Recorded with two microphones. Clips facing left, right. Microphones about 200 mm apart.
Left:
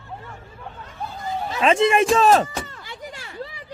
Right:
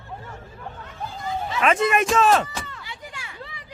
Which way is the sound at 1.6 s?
25° left (ahead or behind).